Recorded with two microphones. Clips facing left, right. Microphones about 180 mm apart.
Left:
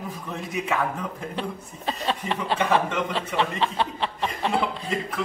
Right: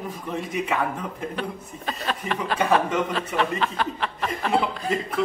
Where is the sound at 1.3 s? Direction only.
30° left (ahead or behind).